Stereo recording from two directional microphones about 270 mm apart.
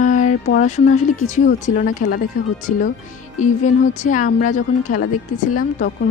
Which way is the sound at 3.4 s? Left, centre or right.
Left.